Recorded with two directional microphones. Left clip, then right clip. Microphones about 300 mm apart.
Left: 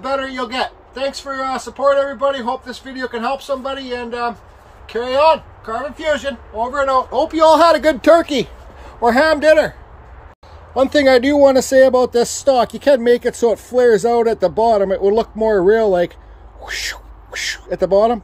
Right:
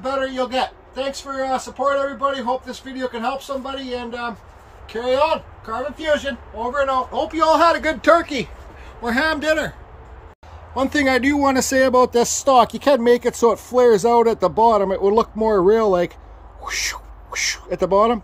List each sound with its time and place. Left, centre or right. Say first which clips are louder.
0.0 s a man's voice: left 1 dB; centre; by 8.5 s left
9.0 s a man's voice: left 8 dB; centre
10.7 s speech: left 6 dB; centre